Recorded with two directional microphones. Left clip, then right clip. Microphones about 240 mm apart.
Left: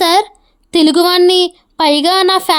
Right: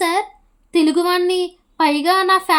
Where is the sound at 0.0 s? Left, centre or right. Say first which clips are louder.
Left 8 dB; left.